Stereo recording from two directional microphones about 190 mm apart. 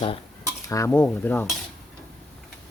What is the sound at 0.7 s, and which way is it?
Cutlery, 15° left (ahead or behind).